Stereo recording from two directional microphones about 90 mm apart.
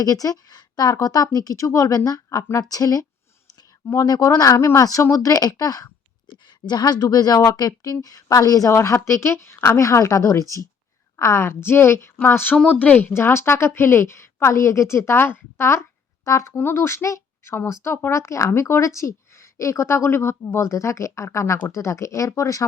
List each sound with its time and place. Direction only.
0.0 s a woman's voice: 40° left (ahead or behind); by 13.1 s 15° left (ahead or behind)
13.1 s a woman's voice: 30° left (ahead or behind)
16.5 s a woman's voice: 20° left (ahead or behind); by 22.6 s 35° left (ahead or behind)